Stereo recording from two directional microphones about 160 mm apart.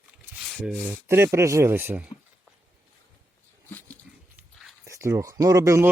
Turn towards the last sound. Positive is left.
turn(degrees=-20)  # may be behind; listen again after turning